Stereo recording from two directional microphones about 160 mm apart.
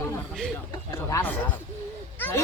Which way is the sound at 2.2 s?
15° left (ahead or behind).